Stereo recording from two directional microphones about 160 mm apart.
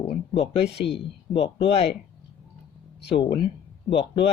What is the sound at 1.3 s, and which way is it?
Speech, 35° left (ahead or behind).